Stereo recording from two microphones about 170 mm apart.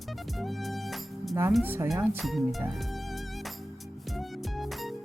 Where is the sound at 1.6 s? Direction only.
10° right (ahead or behind).